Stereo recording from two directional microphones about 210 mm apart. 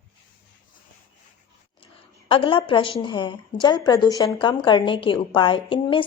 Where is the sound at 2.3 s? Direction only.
25° left (ahead or behind).